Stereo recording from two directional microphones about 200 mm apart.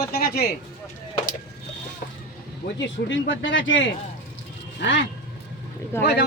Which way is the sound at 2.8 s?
65° left (ahead or behind).